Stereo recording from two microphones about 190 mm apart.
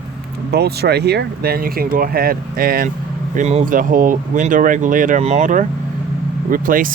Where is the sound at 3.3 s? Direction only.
35° right (ahead or behind).